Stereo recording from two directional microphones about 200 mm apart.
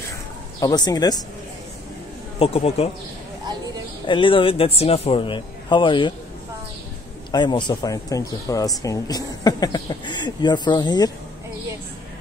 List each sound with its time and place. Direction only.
0.6 s speech: 20° left (ahead or behind)
2.3 s speech: 30° left (ahead or behind)
4.0 s speech: 25° left (ahead or behind)
7.2 s speech: 25° left (ahead or behind)